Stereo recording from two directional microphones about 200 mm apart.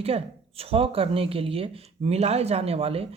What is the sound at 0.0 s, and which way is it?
Speech, 30° right (ahead or behind).